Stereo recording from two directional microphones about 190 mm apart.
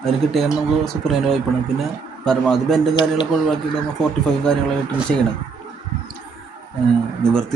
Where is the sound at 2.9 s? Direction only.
25° left (ahead or behind).